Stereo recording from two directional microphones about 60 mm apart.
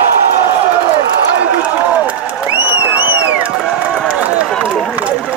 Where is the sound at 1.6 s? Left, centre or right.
Right.